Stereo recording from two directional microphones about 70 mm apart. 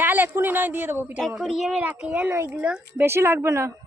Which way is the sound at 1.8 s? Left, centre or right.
Centre.